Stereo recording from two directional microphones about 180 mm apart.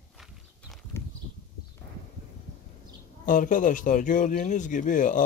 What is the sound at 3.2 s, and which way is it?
Speech, 45° left (ahead or behind).